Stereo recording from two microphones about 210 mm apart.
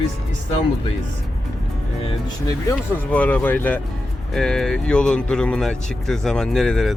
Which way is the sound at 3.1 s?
5° left (ahead or behind).